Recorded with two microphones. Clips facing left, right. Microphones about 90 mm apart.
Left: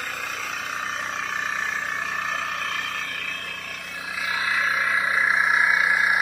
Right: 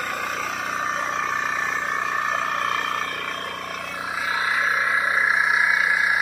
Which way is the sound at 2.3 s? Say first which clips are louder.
Right 5 dB; 35° right (ahead or behind).